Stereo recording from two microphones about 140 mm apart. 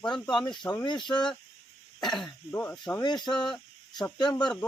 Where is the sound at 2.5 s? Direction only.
15° left (ahead or behind).